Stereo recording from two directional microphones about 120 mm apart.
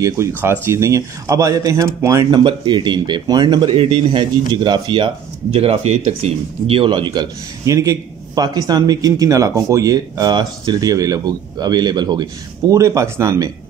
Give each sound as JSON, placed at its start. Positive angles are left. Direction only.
{"t": 0.4, "sound": "speech", "side_deg": -20}
{"t": 2.3, "sound": "speech", "side_deg": -40}
{"t": 5.5, "sound": "speech", "side_deg": -55}
{"t": 12.7, "sound": "speech", "side_deg": -25}